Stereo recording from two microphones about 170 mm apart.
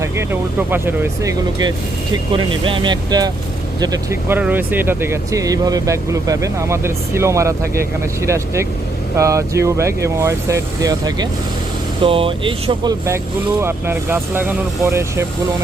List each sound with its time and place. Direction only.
0.0 s speech: 15° right (ahead or behind)
2.3 s speech: 30° right (ahead or behind)